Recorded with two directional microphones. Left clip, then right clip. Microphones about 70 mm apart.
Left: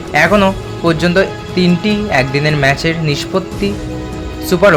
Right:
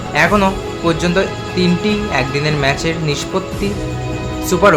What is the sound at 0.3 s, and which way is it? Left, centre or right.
Speech, left.